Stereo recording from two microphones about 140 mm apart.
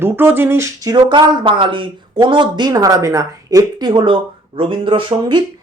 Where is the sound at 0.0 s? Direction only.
15° right (ahead or behind).